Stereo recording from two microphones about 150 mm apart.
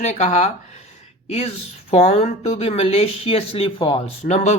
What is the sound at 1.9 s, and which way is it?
Speech, 40° left (ahead or behind).